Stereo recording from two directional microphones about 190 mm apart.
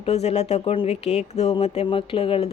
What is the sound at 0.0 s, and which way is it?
Speech, 35° left (ahead or behind).